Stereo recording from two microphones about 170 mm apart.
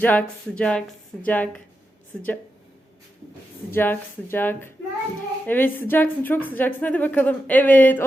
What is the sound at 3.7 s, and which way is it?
Speech, 15° left (ahead or behind).